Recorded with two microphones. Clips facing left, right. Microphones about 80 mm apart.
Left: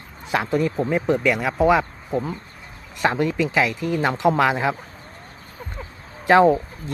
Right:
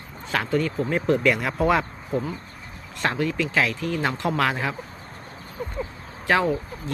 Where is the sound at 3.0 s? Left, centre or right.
Centre.